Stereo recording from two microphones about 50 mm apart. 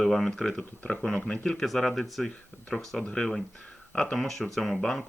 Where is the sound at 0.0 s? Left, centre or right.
Centre.